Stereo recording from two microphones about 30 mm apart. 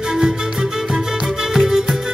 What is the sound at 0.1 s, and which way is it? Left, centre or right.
Music, centre.